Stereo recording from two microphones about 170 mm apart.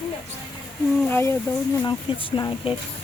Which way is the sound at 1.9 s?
30° left (ahead or behind).